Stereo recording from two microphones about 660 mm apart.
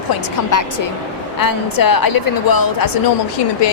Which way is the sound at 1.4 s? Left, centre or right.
Left.